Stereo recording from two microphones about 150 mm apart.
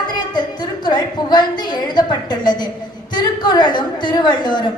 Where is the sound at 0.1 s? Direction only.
30° left (ahead or behind).